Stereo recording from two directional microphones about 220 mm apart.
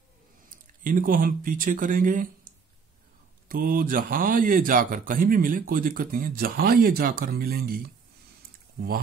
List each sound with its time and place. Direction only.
0.5 s speech: 40° right (ahead or behind)
3.4 s speech: 40° right (ahead or behind)